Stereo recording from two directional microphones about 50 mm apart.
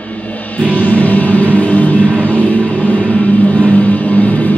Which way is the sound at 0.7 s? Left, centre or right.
Left.